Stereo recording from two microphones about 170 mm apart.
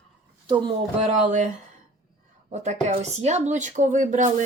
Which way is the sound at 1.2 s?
50° right (ahead or behind).